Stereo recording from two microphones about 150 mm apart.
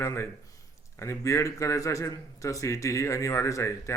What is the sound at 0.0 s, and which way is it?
A man's voice, 20° left (ahead or behind).